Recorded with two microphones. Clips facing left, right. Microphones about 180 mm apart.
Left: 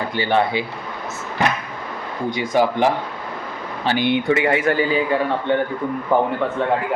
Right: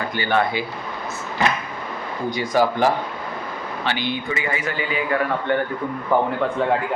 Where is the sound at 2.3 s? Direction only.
25° left (ahead or behind).